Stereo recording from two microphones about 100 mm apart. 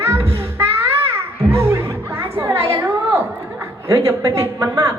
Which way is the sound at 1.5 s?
25° right (ahead or behind).